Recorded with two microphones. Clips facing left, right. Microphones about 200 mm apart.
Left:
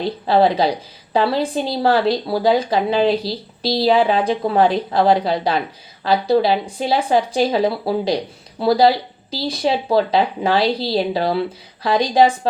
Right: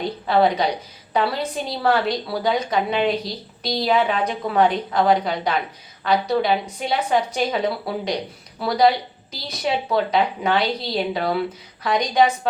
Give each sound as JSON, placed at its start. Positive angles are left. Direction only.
{"t": 0.0, "sound": "speech", "side_deg": 30}